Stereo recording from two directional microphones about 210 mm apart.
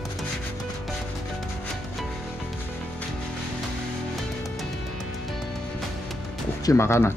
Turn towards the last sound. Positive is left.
turn(degrees=10)  # may be behind; listen again after turning